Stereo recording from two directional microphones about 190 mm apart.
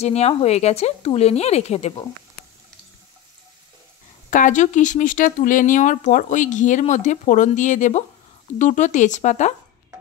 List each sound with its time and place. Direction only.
0.0 s speech: 35° left (ahead or behind)
4.3 s speech: 40° left (ahead or behind)